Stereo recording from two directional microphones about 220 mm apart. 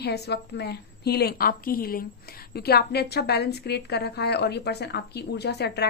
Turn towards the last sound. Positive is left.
turn(degrees=50)  # may be behind; listen again after turning